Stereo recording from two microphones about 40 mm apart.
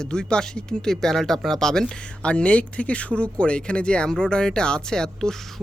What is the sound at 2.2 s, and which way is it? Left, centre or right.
Speech, left.